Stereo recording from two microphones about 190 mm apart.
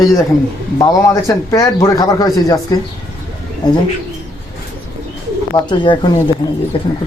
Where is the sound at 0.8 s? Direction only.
20° left (ahead or behind).